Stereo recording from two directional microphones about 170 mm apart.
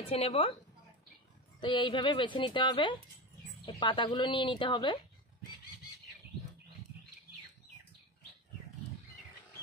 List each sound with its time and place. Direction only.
0.0 s speech: 35° left (ahead or behind)
1.6 s a woman's voice: 30° left (ahead or behind)